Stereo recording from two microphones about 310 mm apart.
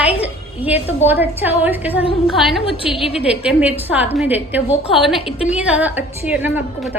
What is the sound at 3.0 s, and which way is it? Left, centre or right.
Speech, centre.